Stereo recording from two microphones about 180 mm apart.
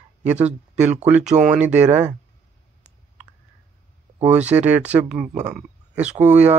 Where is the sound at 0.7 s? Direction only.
5° right (ahead or behind).